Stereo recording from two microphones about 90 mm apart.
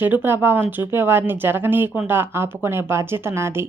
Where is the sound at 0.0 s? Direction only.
20° right (ahead or behind).